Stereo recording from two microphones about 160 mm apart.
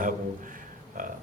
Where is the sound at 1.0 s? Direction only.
55° right (ahead or behind).